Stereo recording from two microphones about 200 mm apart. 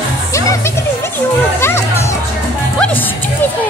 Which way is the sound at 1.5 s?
10° left (ahead or behind).